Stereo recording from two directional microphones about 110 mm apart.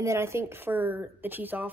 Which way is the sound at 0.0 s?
25° right (ahead or behind).